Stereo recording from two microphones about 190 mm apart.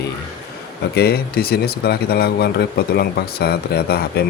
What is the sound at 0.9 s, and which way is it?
Speech, 55° left (ahead or behind).